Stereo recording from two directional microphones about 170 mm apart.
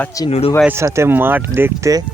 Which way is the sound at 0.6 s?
15° right (ahead or behind).